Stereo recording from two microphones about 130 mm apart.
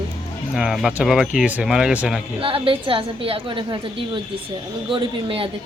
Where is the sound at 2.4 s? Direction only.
45° right (ahead or behind).